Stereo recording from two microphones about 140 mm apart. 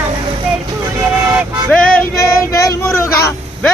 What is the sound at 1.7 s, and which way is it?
Speech, 10° left (ahead or behind).